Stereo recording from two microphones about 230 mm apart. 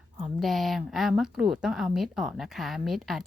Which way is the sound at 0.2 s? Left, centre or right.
Centre.